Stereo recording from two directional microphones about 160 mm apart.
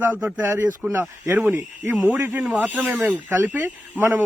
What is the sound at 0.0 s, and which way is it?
Speech, 10° right (ahead or behind).